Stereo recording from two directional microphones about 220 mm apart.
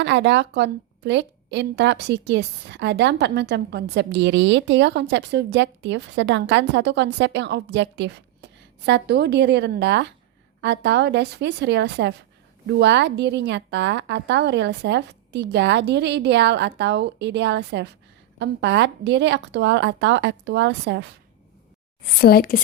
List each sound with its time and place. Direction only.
0.0 s a woman's voice: 55° right (ahead or behind)
22.0 s a woman's voice: 45° left (ahead or behind)